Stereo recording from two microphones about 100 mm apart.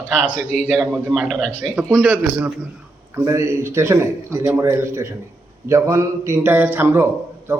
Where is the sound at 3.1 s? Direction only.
30° right (ahead or behind).